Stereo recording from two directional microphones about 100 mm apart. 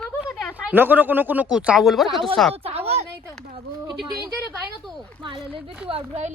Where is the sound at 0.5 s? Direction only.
20° right (ahead or behind); by 2.2 s centre (ahead or behind).